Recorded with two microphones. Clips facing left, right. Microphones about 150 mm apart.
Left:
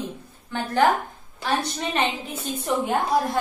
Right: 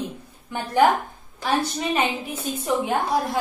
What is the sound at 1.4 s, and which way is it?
A woman's voice, 10° right (ahead or behind).